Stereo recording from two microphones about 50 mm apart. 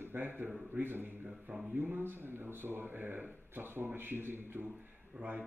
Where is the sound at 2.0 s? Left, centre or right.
Right.